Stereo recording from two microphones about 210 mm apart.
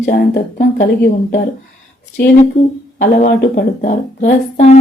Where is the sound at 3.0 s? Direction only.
45° left (ahead or behind).